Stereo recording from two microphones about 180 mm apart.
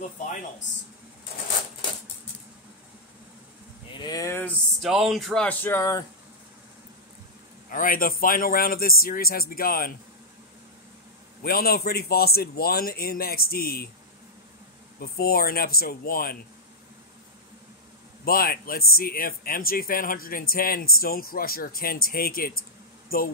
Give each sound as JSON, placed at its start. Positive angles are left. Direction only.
{"t": 3.9, "sound": "a sound", "side_deg": 20}
{"t": 4.8, "sound": "music", "side_deg": 0}
{"t": 7.7, "sound": "speech", "side_deg": 50}
{"t": 11.4, "sound": "speech", "side_deg": 55}
{"t": 15.0, "sound": "speech", "side_deg": 55}
{"t": 18.2, "sound": "speech", "side_deg": 55}